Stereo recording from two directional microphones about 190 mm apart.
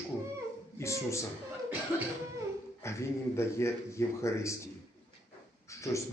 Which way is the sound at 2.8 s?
15° left (ahead or behind).